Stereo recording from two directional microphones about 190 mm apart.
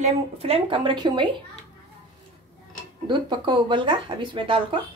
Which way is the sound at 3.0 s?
25° right (ahead or behind).